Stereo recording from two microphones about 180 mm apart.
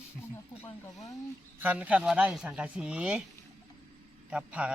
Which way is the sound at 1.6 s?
10° right (ahead or behind).